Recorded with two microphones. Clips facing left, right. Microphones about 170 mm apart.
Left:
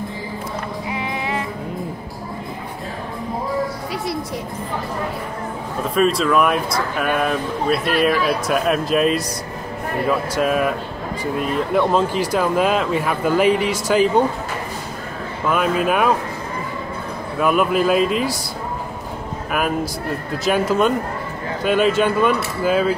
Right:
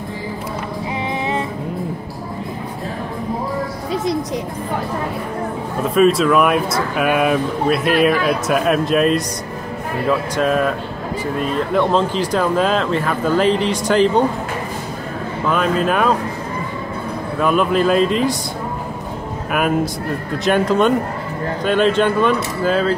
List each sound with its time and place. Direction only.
3.9 s music: 20° right (ahead or behind)
5.9 s speech: centre (ahead or behind)
15.4 s speech: 10° left (ahead or behind)
17.4 s speech: 5° left (ahead or behind)
20.4 s speech: 5° left (ahead or behind)